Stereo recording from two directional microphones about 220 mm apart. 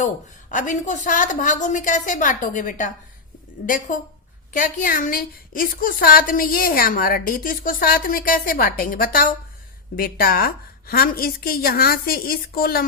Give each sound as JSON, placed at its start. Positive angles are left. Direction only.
{"t": 0.5, "sound": "a woman's voice", "side_deg": 35}